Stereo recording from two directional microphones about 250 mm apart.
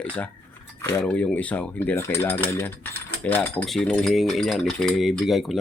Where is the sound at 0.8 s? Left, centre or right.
Centre.